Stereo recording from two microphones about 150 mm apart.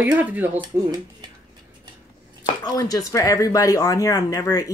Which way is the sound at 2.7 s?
25° left (ahead or behind).